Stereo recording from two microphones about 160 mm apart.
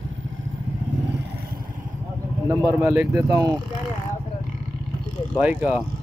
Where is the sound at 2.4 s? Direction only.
20° right (ahead or behind).